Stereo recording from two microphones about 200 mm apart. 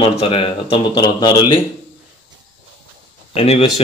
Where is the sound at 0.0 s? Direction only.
30° left (ahead or behind).